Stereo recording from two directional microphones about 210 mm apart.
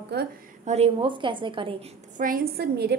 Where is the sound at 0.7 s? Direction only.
30° right (ahead or behind).